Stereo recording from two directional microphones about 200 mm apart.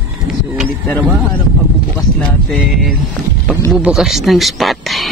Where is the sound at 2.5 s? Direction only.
5° left (ahead or behind).